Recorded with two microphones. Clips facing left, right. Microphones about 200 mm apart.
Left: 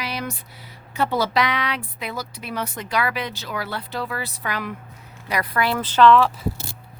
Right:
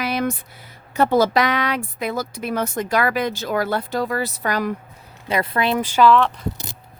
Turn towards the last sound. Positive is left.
turn(degrees=0)  # may be behind; listen again after turning